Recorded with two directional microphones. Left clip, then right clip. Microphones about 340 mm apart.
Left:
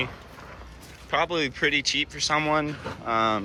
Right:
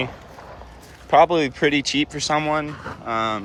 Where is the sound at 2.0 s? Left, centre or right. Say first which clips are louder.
Right 3 dB; centre.